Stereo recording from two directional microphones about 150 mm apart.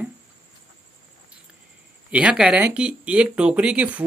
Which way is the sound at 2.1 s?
5° right (ahead or behind).